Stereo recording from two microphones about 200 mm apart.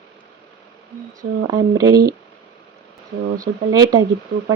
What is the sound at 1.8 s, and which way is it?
Speech, 20° right (ahead or behind).